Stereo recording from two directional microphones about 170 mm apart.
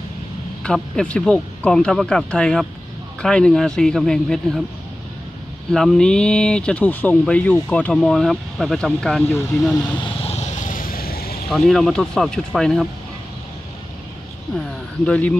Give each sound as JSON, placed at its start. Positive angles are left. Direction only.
{"t": 0.7, "sound": "speech", "side_deg": 5}
{"t": 5.7, "sound": "speech", "side_deg": 5}
{"t": 10.2, "sound": "vehicle", "side_deg": 40}
{"t": 11.4, "sound": "speech", "side_deg": 0}
{"t": 15.0, "sound": "speech", "side_deg": 10}